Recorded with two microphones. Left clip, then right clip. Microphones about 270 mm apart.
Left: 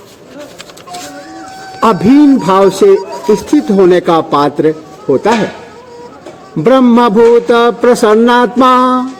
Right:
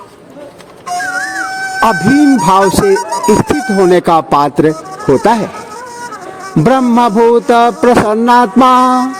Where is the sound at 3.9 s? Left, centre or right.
Right.